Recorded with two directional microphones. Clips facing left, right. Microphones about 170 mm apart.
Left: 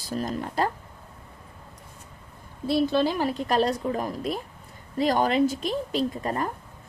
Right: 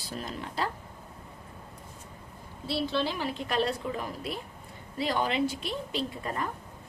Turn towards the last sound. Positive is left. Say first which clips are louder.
# left 6 dB
turn(degrees=40)  # may be behind; listen again after turning